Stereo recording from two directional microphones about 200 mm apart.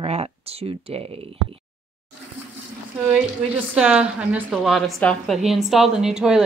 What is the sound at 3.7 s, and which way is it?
A woman's voice, 5° right (ahead or behind).